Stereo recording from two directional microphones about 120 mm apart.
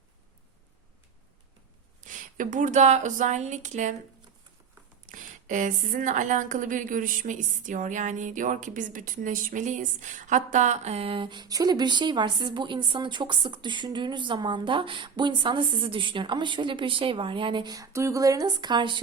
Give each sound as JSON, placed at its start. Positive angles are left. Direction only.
{"t": 2.0, "sound": "speech", "side_deg": -90}
{"t": 5.1, "sound": "a woman's voice", "side_deg": -90}
{"t": 17.7, "sound": "speech", "side_deg": -25}